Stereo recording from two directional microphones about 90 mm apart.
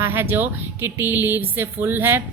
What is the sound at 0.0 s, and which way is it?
A woman's voice, 25° right (ahead or behind).